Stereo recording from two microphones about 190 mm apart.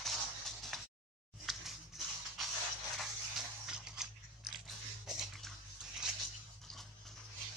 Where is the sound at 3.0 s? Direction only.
Centre (ahead or behind).